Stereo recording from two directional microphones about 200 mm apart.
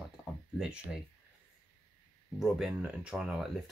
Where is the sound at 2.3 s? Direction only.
Centre (ahead or behind).